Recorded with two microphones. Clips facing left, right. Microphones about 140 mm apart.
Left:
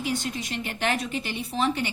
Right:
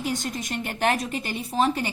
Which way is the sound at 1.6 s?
40° right (ahead or behind).